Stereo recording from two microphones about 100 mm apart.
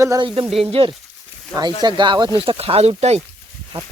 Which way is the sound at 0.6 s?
65° right (ahead or behind).